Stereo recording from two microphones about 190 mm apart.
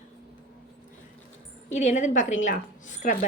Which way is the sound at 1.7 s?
40° left (ahead or behind).